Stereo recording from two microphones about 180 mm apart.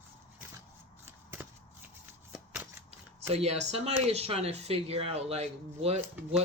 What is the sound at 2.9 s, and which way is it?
Speech, 35° right (ahead or behind).